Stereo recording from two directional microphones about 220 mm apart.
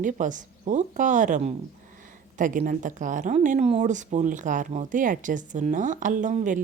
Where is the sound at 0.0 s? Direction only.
35° right (ahead or behind).